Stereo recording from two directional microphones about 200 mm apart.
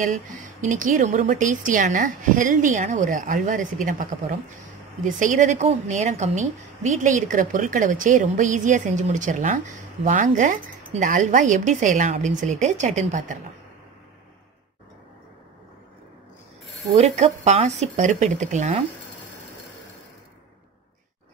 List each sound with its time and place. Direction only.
0.0 s a woman's voice: 40° right (ahead or behind)
16.8 s a woman's voice: 30° right (ahead or behind)